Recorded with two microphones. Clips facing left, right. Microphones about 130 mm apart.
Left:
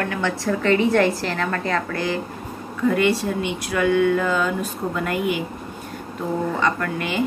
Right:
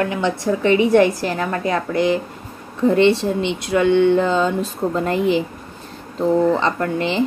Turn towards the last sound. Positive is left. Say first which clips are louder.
# right 4 dB
turn(degrees=-25)  # may be behind; listen again after turning